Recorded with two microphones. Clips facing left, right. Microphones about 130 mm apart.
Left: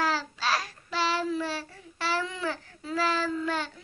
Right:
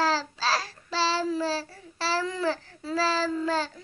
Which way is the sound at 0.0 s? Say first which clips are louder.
Right 3 dB; 30° right (ahead or behind).